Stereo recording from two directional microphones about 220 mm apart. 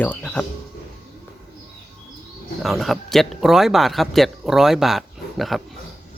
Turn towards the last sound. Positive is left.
turn(degrees=0)  # may be behind; listen again after turning